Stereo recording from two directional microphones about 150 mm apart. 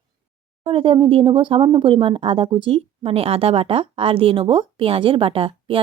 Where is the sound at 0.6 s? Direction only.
35° right (ahead or behind).